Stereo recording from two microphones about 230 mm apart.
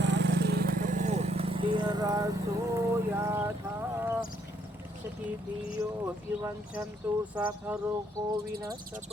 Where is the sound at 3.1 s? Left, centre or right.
Centre.